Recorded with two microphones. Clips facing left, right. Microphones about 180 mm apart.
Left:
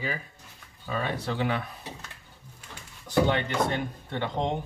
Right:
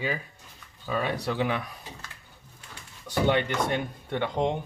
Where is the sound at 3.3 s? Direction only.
15° right (ahead or behind).